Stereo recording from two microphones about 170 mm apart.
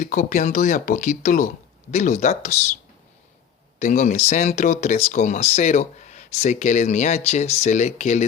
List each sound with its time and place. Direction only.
0.0 s speech: 50° left (ahead or behind)
3.8 s speech: 45° left (ahead or behind)